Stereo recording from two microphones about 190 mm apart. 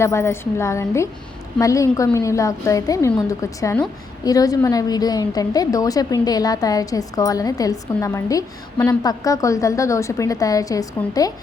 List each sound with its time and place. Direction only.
0.0 s a woman's voice: 15° left (ahead or behind)